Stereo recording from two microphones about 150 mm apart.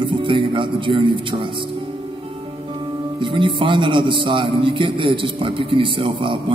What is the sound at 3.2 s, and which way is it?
A man's voice, 35° right (ahead or behind).